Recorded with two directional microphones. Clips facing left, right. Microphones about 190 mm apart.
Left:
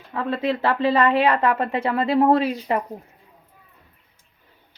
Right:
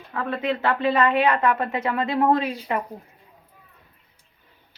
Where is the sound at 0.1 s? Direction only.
25° left (ahead or behind).